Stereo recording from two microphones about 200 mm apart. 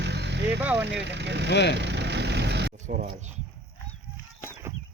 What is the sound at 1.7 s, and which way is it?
Vehicle, 60° right (ahead or behind).